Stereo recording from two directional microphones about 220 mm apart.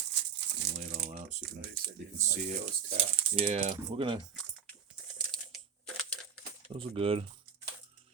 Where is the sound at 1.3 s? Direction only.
40° right (ahead or behind).